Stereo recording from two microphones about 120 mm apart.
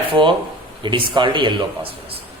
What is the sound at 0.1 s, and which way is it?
A man's voice, 45° right (ahead or behind).